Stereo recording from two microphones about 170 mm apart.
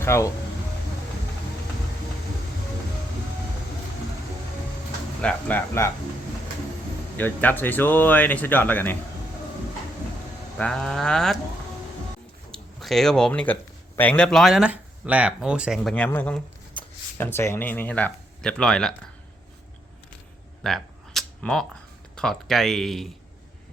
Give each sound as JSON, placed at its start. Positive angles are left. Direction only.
{"t": 0.0, "sound": "speech", "side_deg": 15}
{"t": 5.2, "sound": "speech", "side_deg": 10}
{"t": 7.2, "sound": "speech", "side_deg": 10}
{"t": 10.6, "sound": "speech", "side_deg": 5}
{"t": 12.5, "sound": "speech", "side_deg": 0}
{"t": 20.7, "sound": "camera", "side_deg": 0}
{"t": 22.1, "sound": "speech", "side_deg": 5}